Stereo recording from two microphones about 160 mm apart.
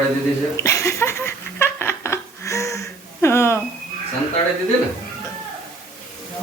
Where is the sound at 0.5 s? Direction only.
20° left (ahead or behind).